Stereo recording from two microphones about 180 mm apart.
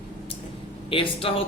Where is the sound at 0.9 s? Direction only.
30° left (ahead or behind).